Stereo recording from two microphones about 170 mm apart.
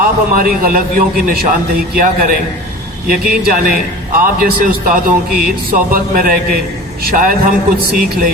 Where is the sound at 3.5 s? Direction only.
60° right (ahead or behind).